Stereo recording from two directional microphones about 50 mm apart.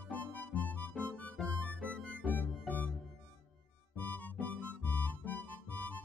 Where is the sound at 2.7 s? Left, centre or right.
Left.